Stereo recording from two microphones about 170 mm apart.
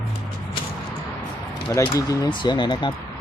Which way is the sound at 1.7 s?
15° left (ahead or behind).